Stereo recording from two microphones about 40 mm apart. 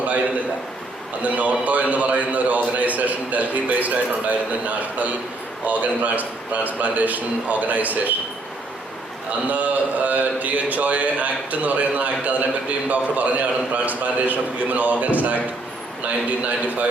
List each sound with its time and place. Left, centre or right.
0.0 s a sound: right
1.2 s a man's voice: right
9.5 s a man's voice: right